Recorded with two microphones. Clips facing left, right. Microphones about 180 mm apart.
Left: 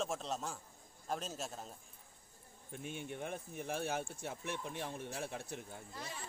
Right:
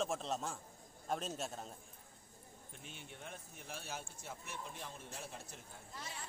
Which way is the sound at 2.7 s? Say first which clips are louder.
Left 11 dB; 55° left (ahead or behind).